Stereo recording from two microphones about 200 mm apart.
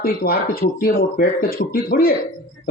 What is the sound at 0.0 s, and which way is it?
A man's voice, 50° left (ahead or behind).